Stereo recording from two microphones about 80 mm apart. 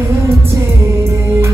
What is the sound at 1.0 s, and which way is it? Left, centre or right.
Music, right.